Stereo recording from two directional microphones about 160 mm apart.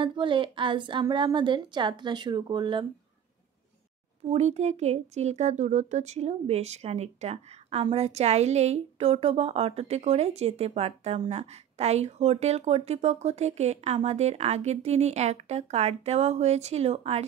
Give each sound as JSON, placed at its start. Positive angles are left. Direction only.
{"t": 0.0, "sound": "a woman's voice", "side_deg": -30}
{"t": 4.3, "sound": "a woman's voice", "side_deg": -45}